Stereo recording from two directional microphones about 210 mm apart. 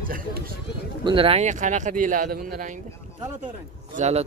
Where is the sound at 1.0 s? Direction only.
25° right (ahead or behind).